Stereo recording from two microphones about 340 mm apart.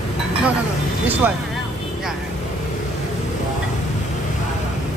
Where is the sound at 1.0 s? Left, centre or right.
Centre.